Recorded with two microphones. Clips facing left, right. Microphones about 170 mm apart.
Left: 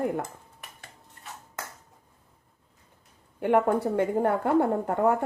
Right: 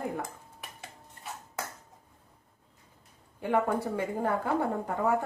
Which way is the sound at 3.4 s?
65° left (ahead or behind).